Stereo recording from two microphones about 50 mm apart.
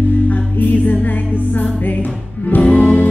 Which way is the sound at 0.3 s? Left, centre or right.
Left.